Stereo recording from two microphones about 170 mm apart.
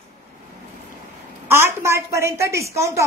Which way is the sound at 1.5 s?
15° right (ahead or behind).